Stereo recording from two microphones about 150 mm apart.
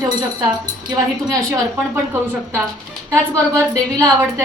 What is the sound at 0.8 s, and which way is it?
Speech, 25° right (ahead or behind).